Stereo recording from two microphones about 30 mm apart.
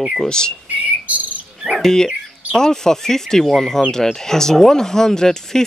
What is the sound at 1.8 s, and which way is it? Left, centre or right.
Speech, left.